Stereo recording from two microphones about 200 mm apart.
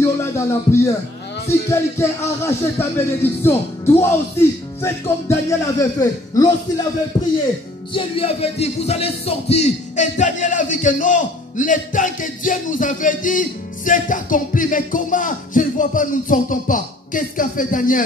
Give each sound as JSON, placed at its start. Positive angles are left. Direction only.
{"t": 0.0, "sound": "speech", "side_deg": 15}
{"t": 7.9, "sound": "music", "side_deg": 30}